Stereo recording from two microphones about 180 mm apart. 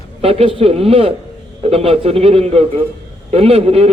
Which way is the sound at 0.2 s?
30° right (ahead or behind).